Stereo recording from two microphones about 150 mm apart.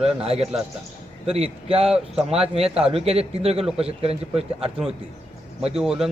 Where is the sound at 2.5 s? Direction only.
40° right (ahead or behind).